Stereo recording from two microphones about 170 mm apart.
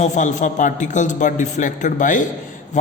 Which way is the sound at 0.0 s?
45° left (ahead or behind).